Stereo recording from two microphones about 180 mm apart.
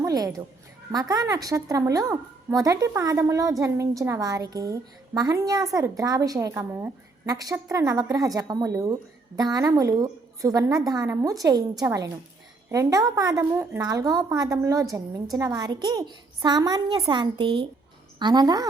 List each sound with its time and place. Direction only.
0.0 s a woman's voice: 20° right (ahead or behind)